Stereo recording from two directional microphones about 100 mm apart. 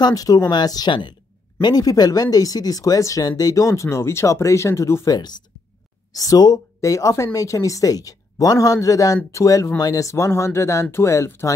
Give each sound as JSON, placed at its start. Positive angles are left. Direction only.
{"t": 0.0, "sound": "speech", "side_deg": 40}